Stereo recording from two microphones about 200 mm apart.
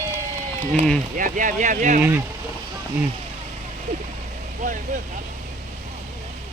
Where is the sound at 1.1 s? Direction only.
40° right (ahead or behind).